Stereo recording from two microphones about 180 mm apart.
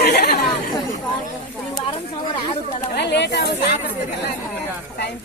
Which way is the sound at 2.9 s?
70° left (ahead or behind).